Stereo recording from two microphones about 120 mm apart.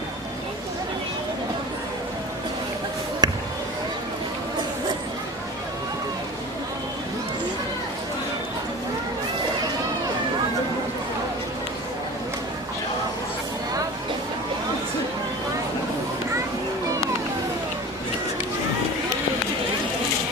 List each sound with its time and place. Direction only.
3.2 s basketball bounce: 35° right (ahead or behind)